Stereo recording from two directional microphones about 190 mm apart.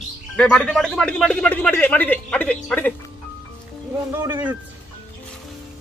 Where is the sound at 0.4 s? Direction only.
5° left (ahead or behind).